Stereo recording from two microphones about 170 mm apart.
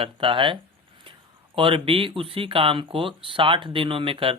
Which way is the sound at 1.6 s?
30° right (ahead or behind).